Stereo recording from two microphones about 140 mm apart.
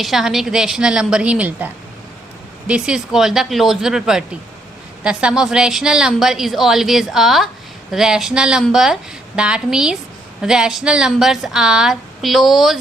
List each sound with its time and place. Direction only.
0.0 s a woman's voice: centre (ahead or behind)